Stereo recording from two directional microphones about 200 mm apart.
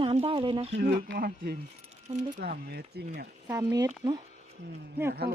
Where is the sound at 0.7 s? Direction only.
50° right (ahead or behind).